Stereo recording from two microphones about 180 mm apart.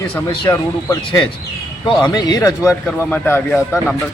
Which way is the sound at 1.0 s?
25° left (ahead or behind).